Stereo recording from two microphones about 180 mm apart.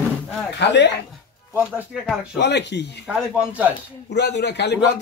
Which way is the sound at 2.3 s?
70° left (ahead or behind).